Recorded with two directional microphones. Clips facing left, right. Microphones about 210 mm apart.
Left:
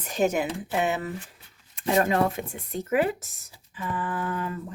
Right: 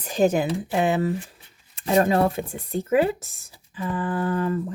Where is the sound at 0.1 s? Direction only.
30° right (ahead or behind).